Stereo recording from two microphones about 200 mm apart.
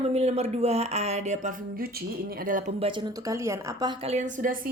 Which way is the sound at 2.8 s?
25° right (ahead or behind).